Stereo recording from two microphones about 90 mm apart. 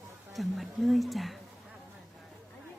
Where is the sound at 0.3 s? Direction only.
Centre (ahead or behind).